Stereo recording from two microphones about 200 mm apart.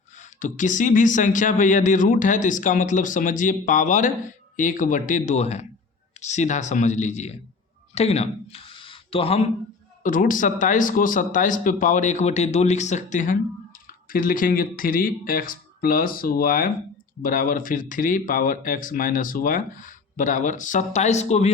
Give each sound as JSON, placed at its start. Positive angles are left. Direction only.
{"t": 0.2, "sound": "speech", "side_deg": 40}
{"t": 10.0, "sound": "speech", "side_deg": 40}